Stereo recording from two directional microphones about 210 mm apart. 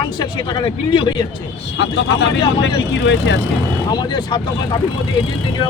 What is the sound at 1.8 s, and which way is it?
Speech, 55° left (ahead or behind).